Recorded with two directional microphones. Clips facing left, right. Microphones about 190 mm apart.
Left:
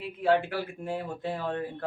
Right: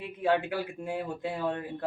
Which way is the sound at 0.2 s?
15° right (ahead or behind).